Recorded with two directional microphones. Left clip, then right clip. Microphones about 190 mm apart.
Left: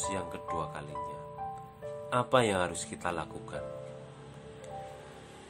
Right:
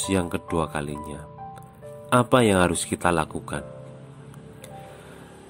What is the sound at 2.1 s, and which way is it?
Speech, 45° right (ahead or behind).